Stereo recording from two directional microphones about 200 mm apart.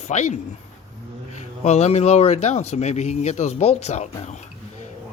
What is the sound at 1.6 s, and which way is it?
A man's voice, 35° left (ahead or behind).